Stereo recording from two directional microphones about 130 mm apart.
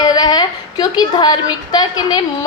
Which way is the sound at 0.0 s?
30° left (ahead or behind).